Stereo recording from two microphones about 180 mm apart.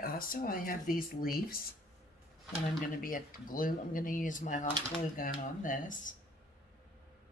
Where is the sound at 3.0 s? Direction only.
50° left (ahead or behind).